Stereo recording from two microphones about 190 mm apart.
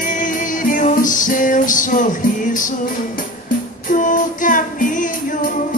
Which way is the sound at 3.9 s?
45° left (ahead or behind).